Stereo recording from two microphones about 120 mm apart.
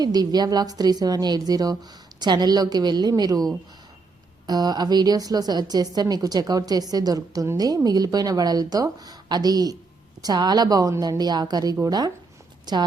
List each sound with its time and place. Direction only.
0.0 s a woman's voice: 35° right (ahead or behind)